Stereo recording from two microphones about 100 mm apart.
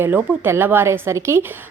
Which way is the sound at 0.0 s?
20° right (ahead or behind).